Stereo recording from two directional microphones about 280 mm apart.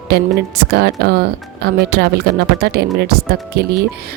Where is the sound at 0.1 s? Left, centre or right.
Right.